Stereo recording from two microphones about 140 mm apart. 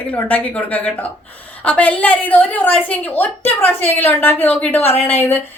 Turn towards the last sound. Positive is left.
turn(degrees=15)  # may be behind; listen again after turning